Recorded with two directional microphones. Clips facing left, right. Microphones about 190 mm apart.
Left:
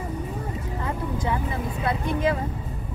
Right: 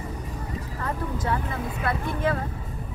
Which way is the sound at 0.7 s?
15° left (ahead or behind).